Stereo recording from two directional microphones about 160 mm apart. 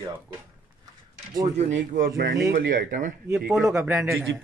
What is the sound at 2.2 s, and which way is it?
Speech, 70° right (ahead or behind).